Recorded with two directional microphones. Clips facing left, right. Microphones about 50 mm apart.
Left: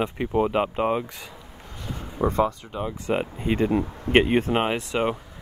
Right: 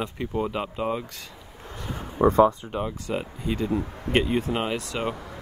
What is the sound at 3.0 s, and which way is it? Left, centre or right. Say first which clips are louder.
Speech: left 4 dB; left.